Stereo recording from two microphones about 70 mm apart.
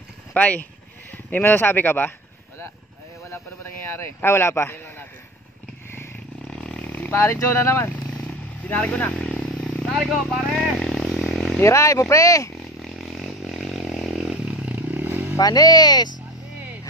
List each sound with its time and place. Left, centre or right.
0.3 s speech: left
3.3 s speech: left
6.5 s a sound: centre
7.1 s speech: left
8.6 s vehicle: left
9.8 s speech: centre
10.8 s vehicle: centre
11.6 s speech: left
12.7 s a sound: centre; by 15.3 s right
15.3 s speech: left